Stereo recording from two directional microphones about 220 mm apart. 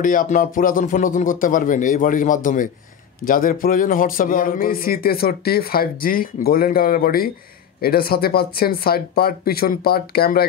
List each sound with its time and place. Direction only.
0.0 s speech: 35° left (ahead or behind)